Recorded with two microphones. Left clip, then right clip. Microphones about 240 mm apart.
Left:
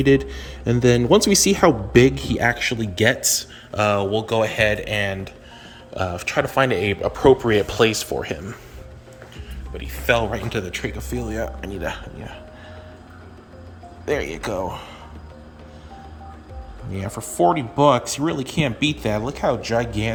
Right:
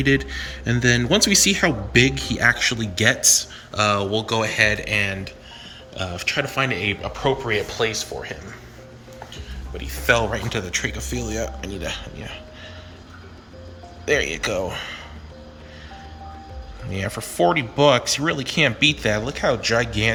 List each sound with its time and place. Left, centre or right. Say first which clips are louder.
0.0 s speech: left 3 dB; centre; by 6.8 s left
7.0 s speech: left 7 dB; left
9.7 s speech: right 1 dB; centre
14.0 s speech: right 3 dB; centre
16.9 s speech: right 3 dB; centre